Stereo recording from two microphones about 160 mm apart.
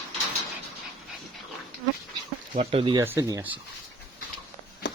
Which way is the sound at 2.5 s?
40° right (ahead or behind).